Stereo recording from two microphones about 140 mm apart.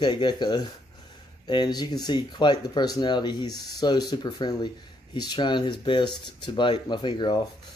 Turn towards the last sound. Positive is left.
turn(degrees=30)  # may be behind; listen again after turning